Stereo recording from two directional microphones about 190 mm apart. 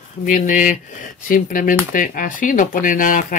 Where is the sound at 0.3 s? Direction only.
45° left (ahead or behind).